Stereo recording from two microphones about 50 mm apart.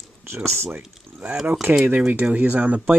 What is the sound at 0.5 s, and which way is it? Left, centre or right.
Speech, right.